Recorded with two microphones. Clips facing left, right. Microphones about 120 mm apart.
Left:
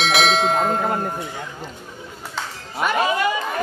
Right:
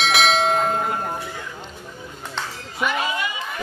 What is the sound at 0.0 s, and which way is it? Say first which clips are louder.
Bell: left 1 dB; centre (ahead or behind).